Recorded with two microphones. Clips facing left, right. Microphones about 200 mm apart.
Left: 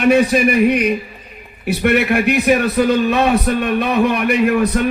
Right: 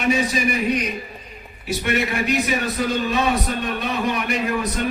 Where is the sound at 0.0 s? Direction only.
60° left (ahead or behind).